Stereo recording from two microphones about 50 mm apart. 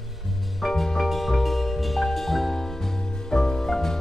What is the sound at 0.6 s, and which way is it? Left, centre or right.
Music, centre.